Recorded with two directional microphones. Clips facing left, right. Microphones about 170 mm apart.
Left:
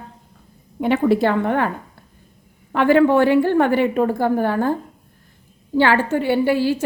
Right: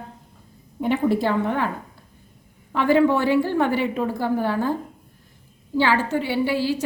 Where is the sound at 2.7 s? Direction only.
60° left (ahead or behind).